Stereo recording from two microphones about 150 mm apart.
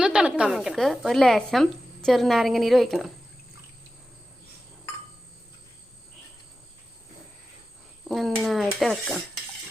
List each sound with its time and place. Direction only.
0.0 s a woman's voice: 5° right (ahead or behind)
8.0 s a woman's voice: centre (ahead or behind)